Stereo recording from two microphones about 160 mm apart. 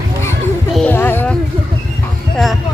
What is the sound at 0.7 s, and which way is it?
Music, 5° left (ahead or behind).